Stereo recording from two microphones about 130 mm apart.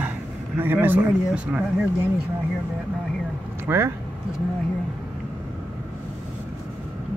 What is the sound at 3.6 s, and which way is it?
Speech, 20° right (ahead or behind).